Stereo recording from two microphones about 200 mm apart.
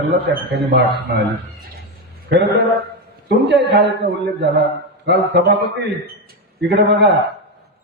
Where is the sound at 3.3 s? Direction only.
60° right (ahead or behind).